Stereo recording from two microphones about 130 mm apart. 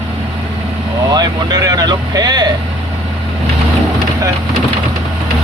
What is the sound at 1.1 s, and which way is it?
Speech, 30° right (ahead or behind).